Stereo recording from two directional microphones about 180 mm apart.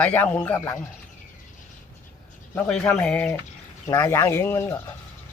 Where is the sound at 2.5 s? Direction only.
5° left (ahead or behind).